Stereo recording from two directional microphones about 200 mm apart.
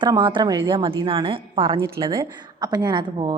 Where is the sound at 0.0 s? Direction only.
20° right (ahead or behind).